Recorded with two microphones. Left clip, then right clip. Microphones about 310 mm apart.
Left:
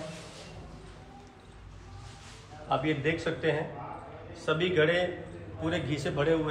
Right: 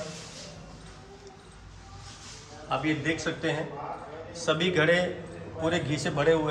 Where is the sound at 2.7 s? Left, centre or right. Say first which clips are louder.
Left 1 dB; centre.